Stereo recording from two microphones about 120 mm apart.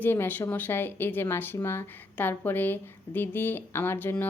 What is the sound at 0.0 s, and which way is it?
Speech, 15° left (ahead or behind).